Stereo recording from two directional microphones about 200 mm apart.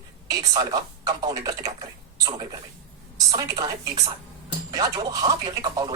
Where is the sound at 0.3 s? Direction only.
20° right (ahead or behind).